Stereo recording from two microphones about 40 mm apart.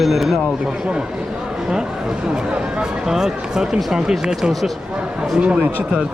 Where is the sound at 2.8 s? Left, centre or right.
Centre.